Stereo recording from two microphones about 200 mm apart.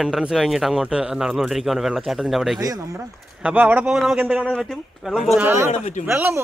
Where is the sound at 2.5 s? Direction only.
15° right (ahead or behind).